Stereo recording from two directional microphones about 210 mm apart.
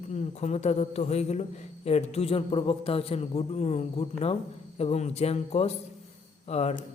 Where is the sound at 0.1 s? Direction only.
35° left (ahead or behind).